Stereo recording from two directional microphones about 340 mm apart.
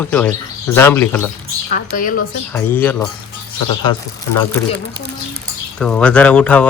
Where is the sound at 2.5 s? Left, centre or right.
Centre.